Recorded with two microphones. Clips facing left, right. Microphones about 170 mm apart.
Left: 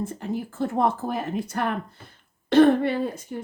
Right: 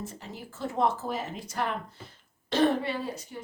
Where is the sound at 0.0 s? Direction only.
55° left (ahead or behind).